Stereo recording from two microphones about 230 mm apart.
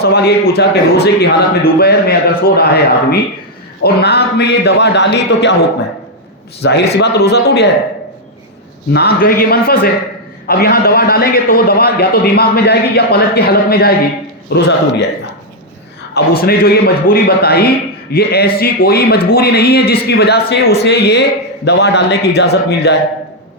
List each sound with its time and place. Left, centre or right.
0.0 s a man's voice: left
6.6 s a man's voice: left
8.9 s a man's voice: left
16.4 s a man's voice: left